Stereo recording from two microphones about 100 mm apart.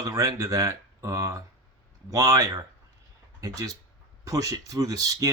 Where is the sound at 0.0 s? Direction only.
35° right (ahead or behind).